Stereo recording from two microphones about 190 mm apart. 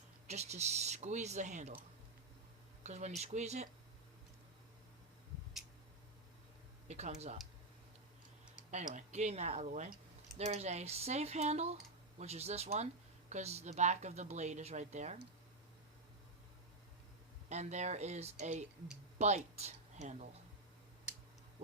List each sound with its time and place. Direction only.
0.3 s speech: 35° right (ahead or behind)
2.8 s speech: 35° right (ahead or behind)
6.8 s speech: 35° right (ahead or behind)
8.7 s speech: 40° right (ahead or behind)
17.5 s speech: 35° right (ahead or behind)